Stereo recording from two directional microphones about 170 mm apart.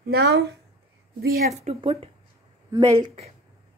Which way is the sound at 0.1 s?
75° right (ahead or behind).